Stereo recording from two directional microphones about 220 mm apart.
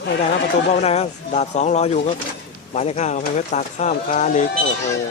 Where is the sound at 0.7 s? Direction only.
30° left (ahead or behind).